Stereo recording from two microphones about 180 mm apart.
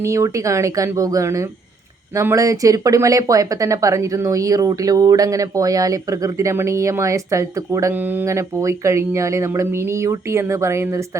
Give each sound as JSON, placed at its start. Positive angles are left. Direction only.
{"t": 0.0, "sound": "speech", "side_deg": -15}